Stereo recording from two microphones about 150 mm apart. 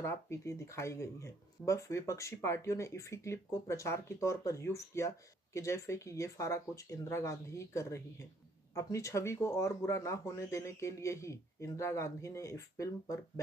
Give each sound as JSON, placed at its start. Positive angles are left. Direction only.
{"t": 0.0, "sound": "speech", "side_deg": 20}